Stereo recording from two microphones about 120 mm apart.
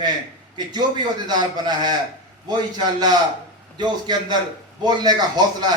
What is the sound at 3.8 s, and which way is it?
A man's voice, 35° right (ahead or behind).